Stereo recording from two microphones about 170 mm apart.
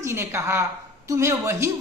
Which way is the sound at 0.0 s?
15° right (ahead or behind).